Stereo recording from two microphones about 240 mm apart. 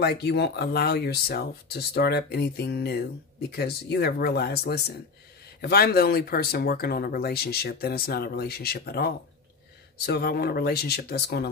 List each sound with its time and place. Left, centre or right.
0.0 s speech: left